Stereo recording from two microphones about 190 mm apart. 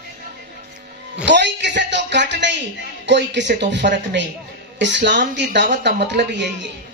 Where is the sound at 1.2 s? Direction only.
65° right (ahead or behind).